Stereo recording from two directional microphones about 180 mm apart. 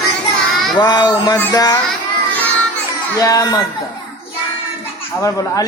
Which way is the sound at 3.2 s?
20° left (ahead or behind).